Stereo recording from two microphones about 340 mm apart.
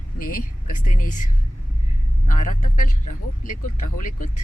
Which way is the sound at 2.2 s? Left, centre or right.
Left.